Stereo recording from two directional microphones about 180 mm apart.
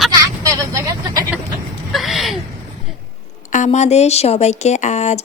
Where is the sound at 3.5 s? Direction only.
40° left (ahead or behind).